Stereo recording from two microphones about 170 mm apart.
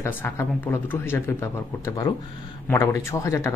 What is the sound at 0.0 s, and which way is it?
Speech, 15° left (ahead or behind).